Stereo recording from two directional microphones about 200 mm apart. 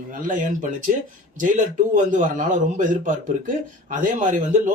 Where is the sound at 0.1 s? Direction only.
40° right (ahead or behind).